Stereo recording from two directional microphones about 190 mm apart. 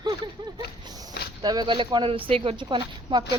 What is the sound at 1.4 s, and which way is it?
Speech, 20° right (ahead or behind).